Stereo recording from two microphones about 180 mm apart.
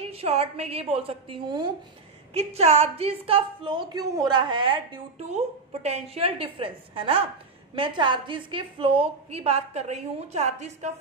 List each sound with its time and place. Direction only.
0.0 s a woman's voice: 35° right (ahead or behind)